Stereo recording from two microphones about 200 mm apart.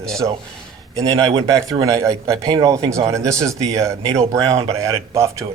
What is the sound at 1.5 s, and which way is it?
Speech, 15° right (ahead or behind).